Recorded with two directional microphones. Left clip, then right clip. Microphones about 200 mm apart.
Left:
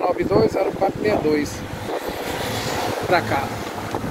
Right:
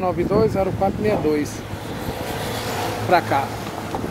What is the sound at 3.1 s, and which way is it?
Speech, 20° right (ahead or behind).